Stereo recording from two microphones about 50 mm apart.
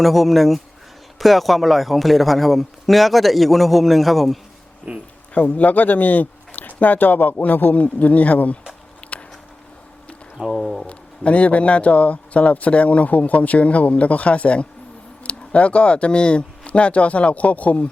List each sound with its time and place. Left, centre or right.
0.0 s a man's voice: centre
4.9 s speech: right
5.3 s speech: left
9.0 s walk: left
10.3 s a sound: centre
10.8 s a man's voice: left